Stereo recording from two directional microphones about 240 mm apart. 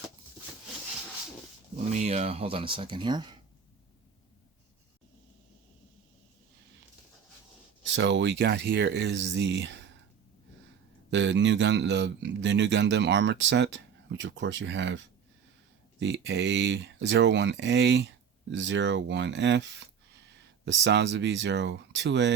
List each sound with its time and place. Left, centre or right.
1.9 s speech: right
7.9 s a man's voice: right
11.1 s a man's voice: right